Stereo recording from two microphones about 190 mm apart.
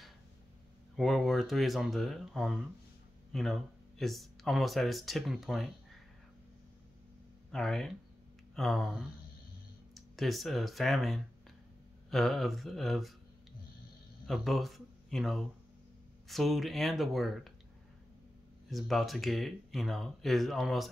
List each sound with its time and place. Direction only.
0.9 s speech: centre (ahead or behind)
7.5 s speech: centre (ahead or behind)
14.2 s speech: centre (ahead or behind)
18.7 s speech: centre (ahead or behind)